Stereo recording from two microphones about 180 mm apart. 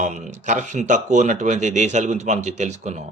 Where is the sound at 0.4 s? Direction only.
45° right (ahead or behind).